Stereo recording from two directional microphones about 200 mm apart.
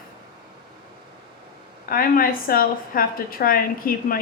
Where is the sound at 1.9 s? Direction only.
45° left (ahead or behind).